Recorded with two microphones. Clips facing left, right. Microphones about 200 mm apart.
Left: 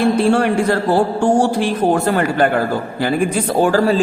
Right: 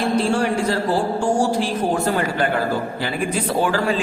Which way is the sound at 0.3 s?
60° left (ahead or behind).